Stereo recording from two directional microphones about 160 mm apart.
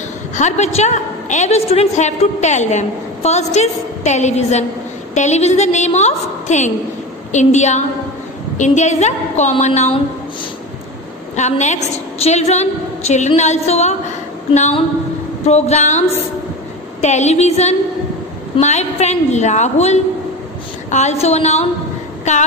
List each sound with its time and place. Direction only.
0.4 s a woman's voice: 45° left (ahead or behind)
11.3 s a woman's voice: 45° left (ahead or behind)